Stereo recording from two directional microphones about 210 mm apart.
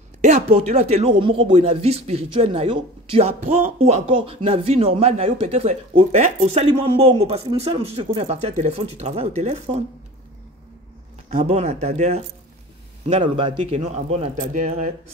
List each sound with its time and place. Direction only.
0.2 s speech: 35° right (ahead or behind)
3.8 s speech: 30° right (ahead or behind)
11.2 s speech: 35° right (ahead or behind)